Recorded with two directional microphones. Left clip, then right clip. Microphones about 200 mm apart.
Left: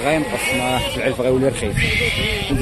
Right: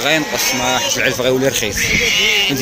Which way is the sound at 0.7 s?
5° left (ahead or behind).